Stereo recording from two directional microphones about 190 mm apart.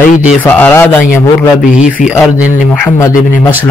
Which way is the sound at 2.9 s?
15° left (ahead or behind).